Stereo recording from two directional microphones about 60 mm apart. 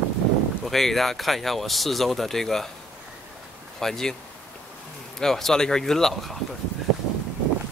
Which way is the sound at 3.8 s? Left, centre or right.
Centre.